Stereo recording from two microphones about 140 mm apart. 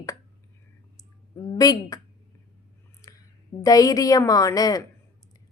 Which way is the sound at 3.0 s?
20° left (ahead or behind).